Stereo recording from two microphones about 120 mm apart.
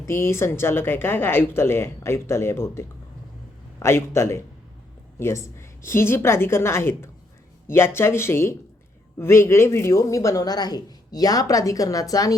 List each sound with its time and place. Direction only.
0.0 s speech: 20° left (ahead or behind)